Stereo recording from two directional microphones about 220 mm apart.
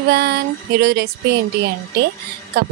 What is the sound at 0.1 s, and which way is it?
A woman's voice, 45° right (ahead or behind).